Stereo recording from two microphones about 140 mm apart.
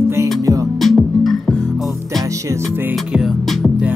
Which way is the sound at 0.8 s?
Centre (ahead or behind).